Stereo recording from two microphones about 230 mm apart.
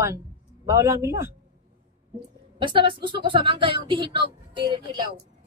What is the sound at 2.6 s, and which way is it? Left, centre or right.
Speech, right.